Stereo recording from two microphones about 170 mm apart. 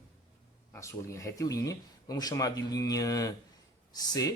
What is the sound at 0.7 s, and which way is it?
Speech, 15° left (ahead or behind).